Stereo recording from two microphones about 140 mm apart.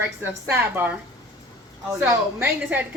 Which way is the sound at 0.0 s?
15° right (ahead or behind).